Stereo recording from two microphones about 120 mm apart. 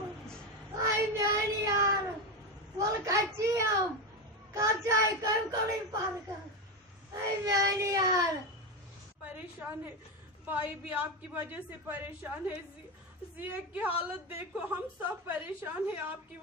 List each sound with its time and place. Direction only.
0.7 s child singing: 30° right (ahead or behind)
2.8 s a sound: 25° right (ahead or behind)
4.6 s child singing: 25° right (ahead or behind)
7.4 s child singing: 25° right (ahead or behind)
9.3 s a woman's voice: 15° right (ahead or behind)